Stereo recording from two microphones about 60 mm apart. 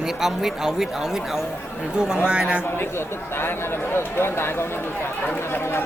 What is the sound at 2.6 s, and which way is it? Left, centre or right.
Speech, left.